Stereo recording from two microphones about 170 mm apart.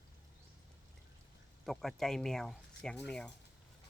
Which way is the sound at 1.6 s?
Centre (ahead or behind).